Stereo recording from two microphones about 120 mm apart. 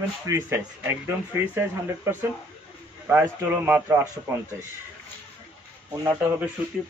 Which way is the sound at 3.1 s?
15° right (ahead or behind).